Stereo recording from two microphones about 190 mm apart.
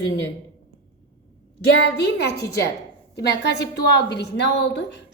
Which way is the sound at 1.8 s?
60° left (ahead or behind).